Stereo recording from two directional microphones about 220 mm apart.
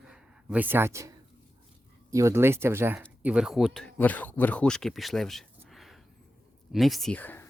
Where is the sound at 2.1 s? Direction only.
15° right (ahead or behind).